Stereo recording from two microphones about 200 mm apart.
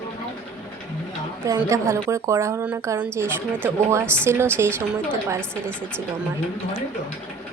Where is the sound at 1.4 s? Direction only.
15° right (ahead or behind).